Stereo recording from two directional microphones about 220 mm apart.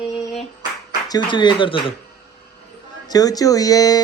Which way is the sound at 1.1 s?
20° left (ahead or behind).